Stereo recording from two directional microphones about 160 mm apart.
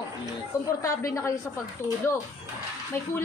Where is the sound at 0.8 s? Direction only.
20° left (ahead or behind).